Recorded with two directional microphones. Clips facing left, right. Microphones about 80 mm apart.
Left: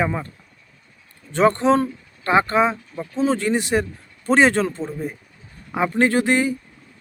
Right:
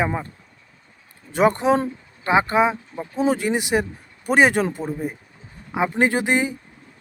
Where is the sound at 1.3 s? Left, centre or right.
Centre.